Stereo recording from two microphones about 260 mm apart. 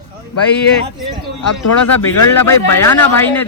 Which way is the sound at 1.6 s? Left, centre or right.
Left.